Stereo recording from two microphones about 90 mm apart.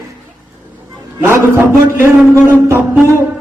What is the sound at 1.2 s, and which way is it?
Speech, 25° right (ahead or behind).